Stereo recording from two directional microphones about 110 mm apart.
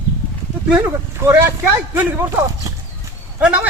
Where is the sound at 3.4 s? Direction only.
10° right (ahead or behind).